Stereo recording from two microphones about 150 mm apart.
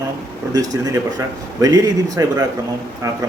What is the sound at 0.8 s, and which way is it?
Speech, 20° right (ahead or behind).